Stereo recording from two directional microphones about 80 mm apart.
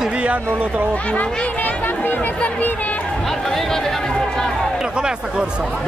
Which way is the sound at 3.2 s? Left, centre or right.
Centre.